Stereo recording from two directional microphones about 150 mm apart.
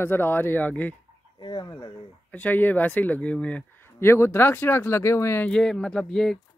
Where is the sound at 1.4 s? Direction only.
30° left (ahead or behind).